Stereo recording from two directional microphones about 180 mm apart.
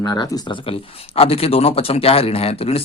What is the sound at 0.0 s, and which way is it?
Speech, 20° left (ahead or behind).